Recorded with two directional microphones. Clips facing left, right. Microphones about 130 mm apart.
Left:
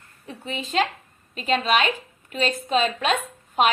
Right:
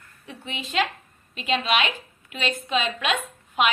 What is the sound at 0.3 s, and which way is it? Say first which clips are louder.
A woman's voice: left 4 dB; 40° left (ahead or behind).